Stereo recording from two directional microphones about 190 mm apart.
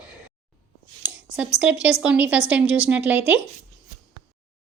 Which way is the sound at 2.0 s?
5° right (ahead or behind).